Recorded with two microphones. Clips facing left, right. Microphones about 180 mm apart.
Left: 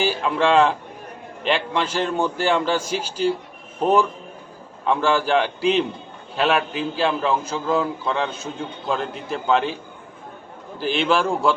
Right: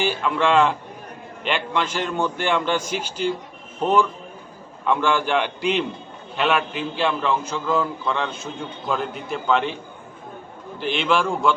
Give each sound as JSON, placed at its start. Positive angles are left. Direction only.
{"t": 0.0, "sound": "a man's voice", "side_deg": 35}
{"t": 4.9, "sound": "a man's voice", "side_deg": 35}
{"t": 10.8, "sound": "a man's voice", "side_deg": 35}